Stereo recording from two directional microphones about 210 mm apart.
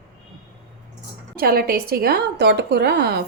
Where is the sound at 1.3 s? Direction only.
45° right (ahead or behind).